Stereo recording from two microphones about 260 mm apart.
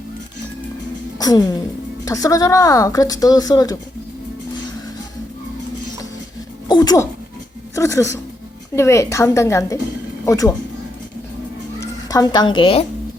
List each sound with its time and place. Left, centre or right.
1.2 s speech: centre
6.7 s speech: centre
11.8 s a woman's voice: centre